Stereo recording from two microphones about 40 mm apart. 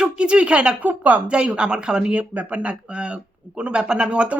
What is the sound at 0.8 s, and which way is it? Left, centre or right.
Speech, right.